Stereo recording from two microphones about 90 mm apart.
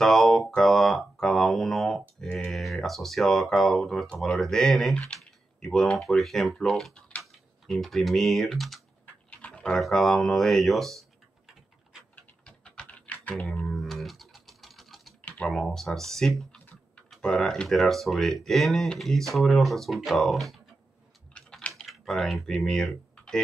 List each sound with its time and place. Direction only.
0.0 s mantra: centre (ahead or behind)
0.6 s a sound: 5° left (ahead or behind)
2.5 s speech: centre (ahead or behind)
9.0 s typing: 15° left (ahead or behind); by 12.0 s centre (ahead or behind)
12.2 s typing: 15° left (ahead or behind)
13.6 s guitar: 5° left (ahead or behind)
15.2 s speech: 10° left (ahead or behind)
16.5 s typing: 15° left (ahead or behind)
17.1 s speech: 5° left (ahead or behind)
21.3 s typing: 10° left (ahead or behind)